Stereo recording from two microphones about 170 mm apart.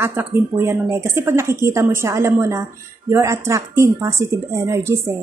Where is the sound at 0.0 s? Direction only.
15° right (ahead or behind).